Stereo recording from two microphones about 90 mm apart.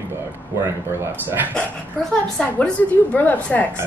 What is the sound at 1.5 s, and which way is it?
A woman's voice, 10° left (ahead or behind).